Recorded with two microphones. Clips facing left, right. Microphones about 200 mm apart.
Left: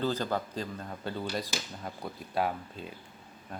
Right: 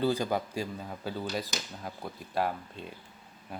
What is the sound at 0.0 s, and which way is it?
Speech, 10° right (ahead or behind).